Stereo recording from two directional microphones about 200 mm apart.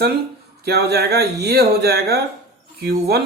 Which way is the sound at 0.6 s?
55° right (ahead or behind).